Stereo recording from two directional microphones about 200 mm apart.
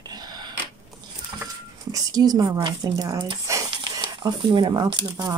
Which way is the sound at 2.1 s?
20° right (ahead or behind).